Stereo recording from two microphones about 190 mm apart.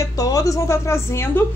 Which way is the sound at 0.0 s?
20° left (ahead or behind).